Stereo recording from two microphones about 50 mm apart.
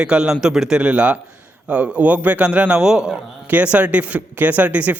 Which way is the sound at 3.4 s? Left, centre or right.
Right.